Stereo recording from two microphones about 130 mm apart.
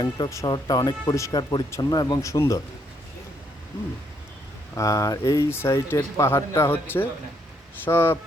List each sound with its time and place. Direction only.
0.0 s speech: 25° left (ahead or behind)
4.7 s speech: 25° left (ahead or behind)